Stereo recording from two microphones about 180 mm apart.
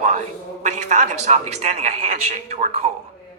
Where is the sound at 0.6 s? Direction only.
40° right (ahead or behind).